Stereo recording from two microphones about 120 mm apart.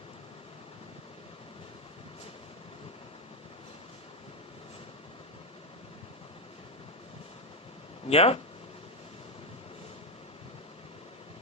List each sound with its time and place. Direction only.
8.0 s speech: 55° left (ahead or behind)